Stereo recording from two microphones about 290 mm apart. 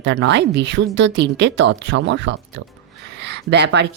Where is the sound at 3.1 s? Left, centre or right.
Right.